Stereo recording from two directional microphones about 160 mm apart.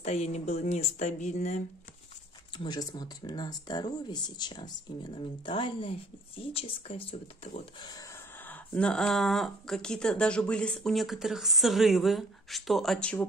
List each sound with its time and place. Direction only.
0.0 s speech: 40° left (ahead or behind)
2.5 s speech: 25° left (ahead or behind)
8.5 s speech: 5° left (ahead or behind)